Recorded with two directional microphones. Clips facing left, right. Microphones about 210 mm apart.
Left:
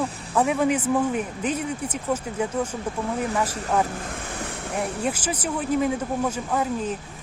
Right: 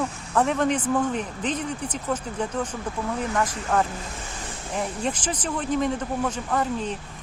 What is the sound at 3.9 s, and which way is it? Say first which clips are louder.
Waves: left 4 dB; 55° left (ahead or behind).